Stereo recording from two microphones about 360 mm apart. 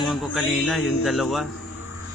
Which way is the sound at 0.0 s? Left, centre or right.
Centre.